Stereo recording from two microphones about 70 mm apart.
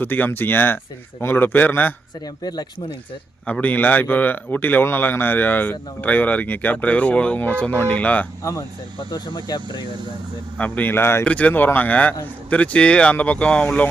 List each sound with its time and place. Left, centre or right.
0.0 s speech: left
2.4 s speech: left
3.4 s speech: left
9.0 s speech: left
10.6 s speech: left
11.3 s speech: left